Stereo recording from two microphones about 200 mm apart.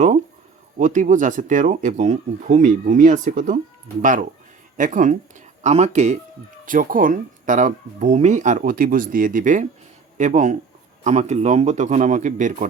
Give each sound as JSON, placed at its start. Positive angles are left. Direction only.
{"t": 0.8, "sound": "speech", "side_deg": -40}